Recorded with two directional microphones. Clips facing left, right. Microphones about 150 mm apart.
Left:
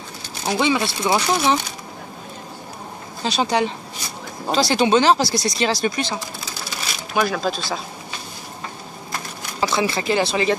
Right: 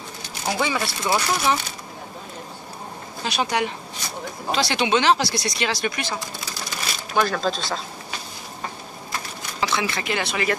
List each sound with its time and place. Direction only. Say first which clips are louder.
0.5 s speech: left 4 dB; 20° left (ahead or behind)
3.3 s speech: left 4 dB; 30° left (ahead or behind)
7.2 s speech: left 1 dB; 10° left (ahead or behind)
9.6 s speech: left 4 dB; 35° left (ahead or behind)